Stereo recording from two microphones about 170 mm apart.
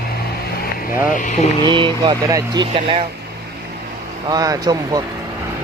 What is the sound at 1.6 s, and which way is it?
Speech, 25° right (ahead or behind).